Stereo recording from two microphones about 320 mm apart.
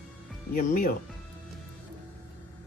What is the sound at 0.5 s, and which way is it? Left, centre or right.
Speech, left.